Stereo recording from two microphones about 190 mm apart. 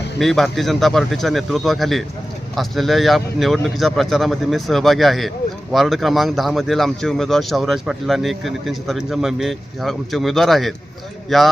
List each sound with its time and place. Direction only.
0.2 s a man's voice: centre (ahead or behind)